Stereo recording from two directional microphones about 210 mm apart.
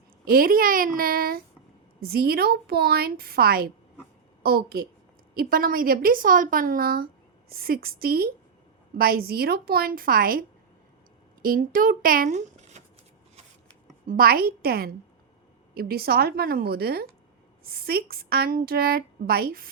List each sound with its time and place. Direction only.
0.3 s a woman's voice: 45° right (ahead or behind)
11.4 s speech: 45° right (ahead or behind)
14.1 s a woman's voice: 45° right (ahead or behind)